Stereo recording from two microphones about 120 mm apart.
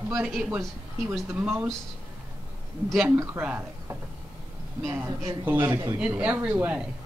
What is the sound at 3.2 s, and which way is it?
Speech, 15° right (ahead or behind).